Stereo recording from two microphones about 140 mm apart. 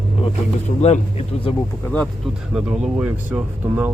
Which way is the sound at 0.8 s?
50° left (ahead or behind).